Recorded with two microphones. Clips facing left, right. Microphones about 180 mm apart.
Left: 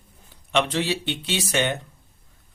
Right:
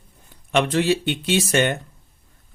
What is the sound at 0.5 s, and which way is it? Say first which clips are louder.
Speech: right 4 dB; 50° right (ahead or behind).